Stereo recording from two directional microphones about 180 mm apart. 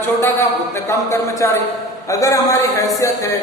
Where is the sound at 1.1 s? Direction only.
15° left (ahead or behind).